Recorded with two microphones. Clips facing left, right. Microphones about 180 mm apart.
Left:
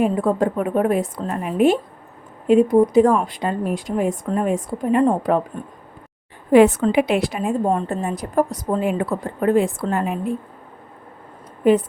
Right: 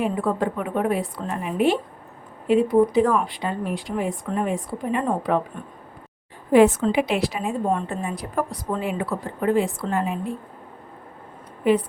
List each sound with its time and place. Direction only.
0.0 s a woman's voice: 45° left (ahead or behind)
6.5 s a woman's voice: 60° left (ahead or behind)